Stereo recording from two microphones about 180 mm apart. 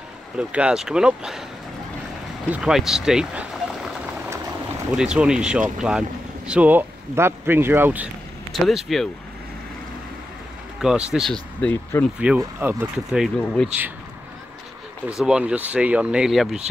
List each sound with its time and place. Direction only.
0.4 s speech: 5° right (ahead or behind)
2.5 s a sound: 5° right (ahead or behind)
4.9 s speech: 5° right (ahead or behind)
8.5 s speech: centre (ahead or behind)
10.8 s speech: 5° right (ahead or behind)
12.4 s speech: 15° right (ahead or behind)
13.4 s speech: 5° left (ahead or behind)
15.0 s speech: 5° right (ahead or behind)